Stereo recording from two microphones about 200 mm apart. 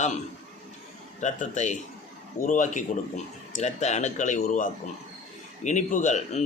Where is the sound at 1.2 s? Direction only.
35° left (ahead or behind).